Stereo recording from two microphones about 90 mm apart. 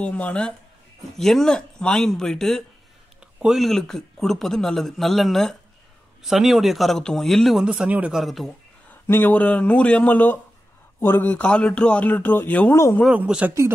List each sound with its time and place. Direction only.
0.0 s a man's voice: 15° left (ahead or behind)
7.6 s speech: 10° right (ahead or behind)
8.2 s a man's voice: centre (ahead or behind)
9.0 s a man's voice: 25° left (ahead or behind)
13.1 s speech: 15° right (ahead or behind)